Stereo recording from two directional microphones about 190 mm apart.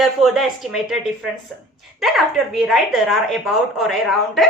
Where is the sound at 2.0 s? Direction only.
Centre (ahead or behind).